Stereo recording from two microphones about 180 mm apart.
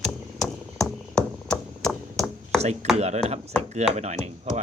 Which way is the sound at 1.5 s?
5° left (ahead or behind).